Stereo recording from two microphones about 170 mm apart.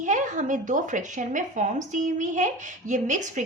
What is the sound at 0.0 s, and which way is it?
A woman's voice, 45° right (ahead or behind).